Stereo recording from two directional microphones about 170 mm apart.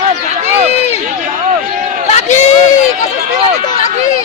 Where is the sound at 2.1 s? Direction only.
40° left (ahead or behind).